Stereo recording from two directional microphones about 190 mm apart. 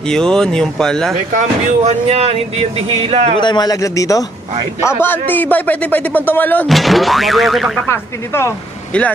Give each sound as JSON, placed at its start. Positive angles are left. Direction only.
{"t": 0.1, "sound": "speech", "side_deg": 5}
{"t": 1.9, "sound": "speech", "side_deg": -30}
{"t": 3.3, "sound": "a man's voice", "side_deg": 25}
{"t": 7.9, "sound": "speech", "side_deg": 15}